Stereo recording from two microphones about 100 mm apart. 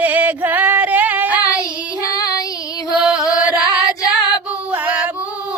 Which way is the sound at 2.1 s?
40° left (ahead or behind).